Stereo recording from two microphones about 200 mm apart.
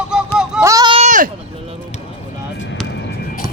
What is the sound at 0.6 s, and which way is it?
Speech, 15° right (ahead or behind).